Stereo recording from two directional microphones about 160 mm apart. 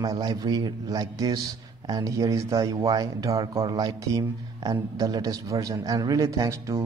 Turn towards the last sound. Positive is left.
turn(degrees=-20)  # may be behind; listen again after turning